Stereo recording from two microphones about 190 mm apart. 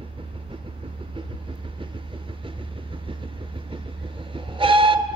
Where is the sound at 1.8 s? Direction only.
25° right (ahead or behind).